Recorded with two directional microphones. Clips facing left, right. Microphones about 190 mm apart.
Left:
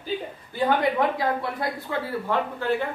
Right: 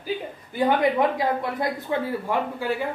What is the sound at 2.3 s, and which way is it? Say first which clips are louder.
Speech: left 3 dB; 10° right (ahead or behind).